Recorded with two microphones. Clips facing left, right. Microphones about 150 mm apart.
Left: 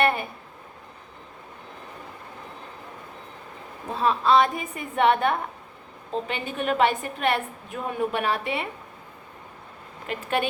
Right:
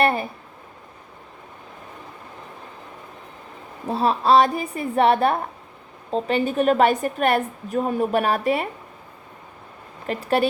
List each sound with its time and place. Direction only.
0.0 s speech: 35° right (ahead or behind)
3.8 s a woman's voice: 35° right (ahead or behind)
10.1 s a woman's voice: 35° right (ahead or behind)